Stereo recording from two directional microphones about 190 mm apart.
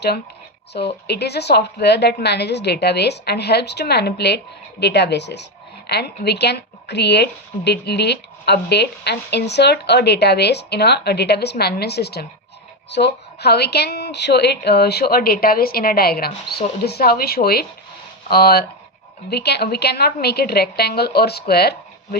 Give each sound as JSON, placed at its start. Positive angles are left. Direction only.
{"t": 0.7, "sound": "a woman's voice", "side_deg": 60}